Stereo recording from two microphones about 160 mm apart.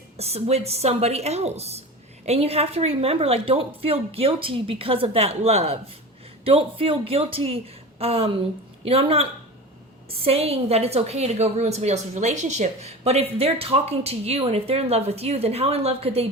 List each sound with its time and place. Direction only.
0.2 s a woman's voice: 40° right (ahead or behind)